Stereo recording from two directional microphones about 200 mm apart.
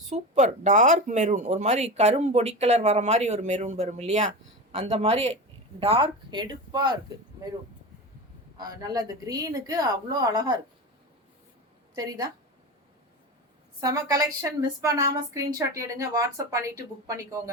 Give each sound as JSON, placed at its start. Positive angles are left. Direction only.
{"t": 0.1, "sound": "speech", "side_deg": -35}
{"t": 8.5, "sound": "speech", "side_deg": -20}
{"t": 11.9, "sound": "speech", "side_deg": -20}
{"t": 13.8, "sound": "a woman's voice", "side_deg": -20}